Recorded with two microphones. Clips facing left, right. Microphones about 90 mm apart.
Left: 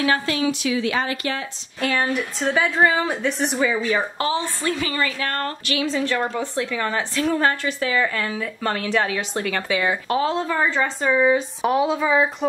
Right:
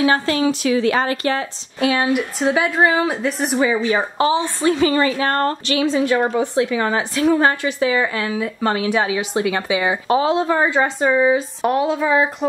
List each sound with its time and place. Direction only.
0.3 s a woman's voice: 40° right (ahead or behind)
1.8 s a woman's voice: 10° right (ahead or behind)
11.1 s speech: 5° right (ahead or behind)